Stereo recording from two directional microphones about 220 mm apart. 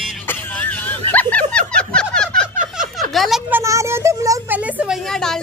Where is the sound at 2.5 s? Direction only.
35° right (ahead or behind).